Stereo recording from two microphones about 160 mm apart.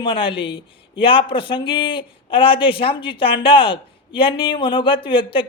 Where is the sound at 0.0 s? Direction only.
30° left (ahead or behind).